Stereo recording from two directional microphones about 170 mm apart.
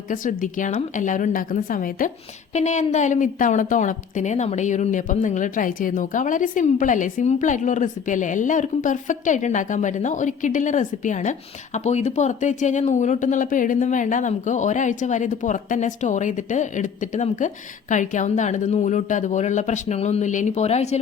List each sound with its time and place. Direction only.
0.1 s a woman's voice: 50° left (ahead or behind)
2.6 s a woman's voice: 45° left (ahead or behind)